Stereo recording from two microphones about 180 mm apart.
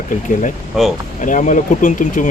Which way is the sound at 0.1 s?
45° left (ahead or behind).